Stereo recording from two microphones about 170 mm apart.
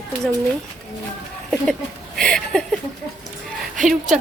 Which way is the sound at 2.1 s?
5° left (ahead or behind).